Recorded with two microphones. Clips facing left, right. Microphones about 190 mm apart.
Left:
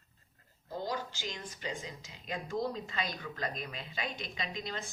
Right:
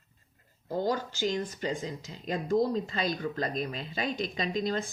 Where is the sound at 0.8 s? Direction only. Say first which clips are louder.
Right 9 dB; 45° right (ahead or behind).